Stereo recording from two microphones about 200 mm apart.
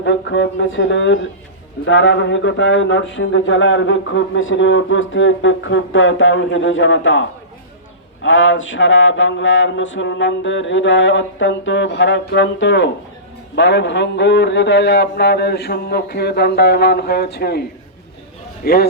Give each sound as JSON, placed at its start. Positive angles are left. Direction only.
{"t": 0.0, "sound": "speech", "side_deg": 65}
{"t": 18.6, "sound": "a man's voice", "side_deg": 50}